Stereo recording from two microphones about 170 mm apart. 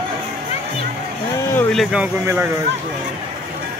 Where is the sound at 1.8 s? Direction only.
5° right (ahead or behind).